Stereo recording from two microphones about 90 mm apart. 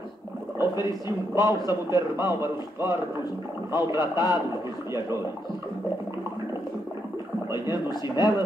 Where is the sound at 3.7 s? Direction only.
50° left (ahead or behind).